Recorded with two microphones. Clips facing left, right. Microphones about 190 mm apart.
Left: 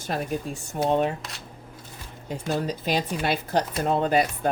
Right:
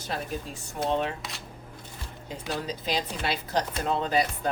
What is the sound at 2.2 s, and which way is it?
Speech, 50° left (ahead or behind).